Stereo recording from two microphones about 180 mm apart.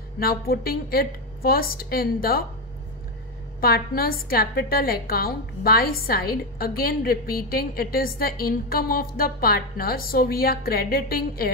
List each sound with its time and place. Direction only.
0.2 s a woman's voice: 55° left (ahead or behind)
3.6 s a woman's voice: 55° left (ahead or behind)